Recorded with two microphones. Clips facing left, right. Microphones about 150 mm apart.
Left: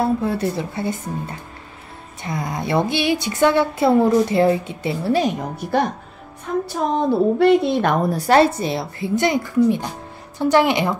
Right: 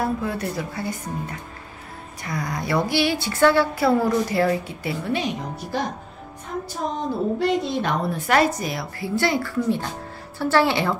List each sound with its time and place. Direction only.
0.0 s speech: 30° left (ahead or behind)
5.1 s a woman's voice: 50° left (ahead or behind)
7.3 s speech: 60° left (ahead or behind); by 11.0 s 15° left (ahead or behind)